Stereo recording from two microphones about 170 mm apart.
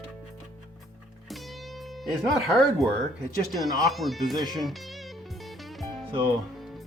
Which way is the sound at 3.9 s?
Centre (ahead or behind).